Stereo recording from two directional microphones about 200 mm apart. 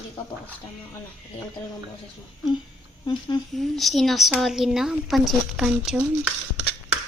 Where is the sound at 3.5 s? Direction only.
Centre (ahead or behind).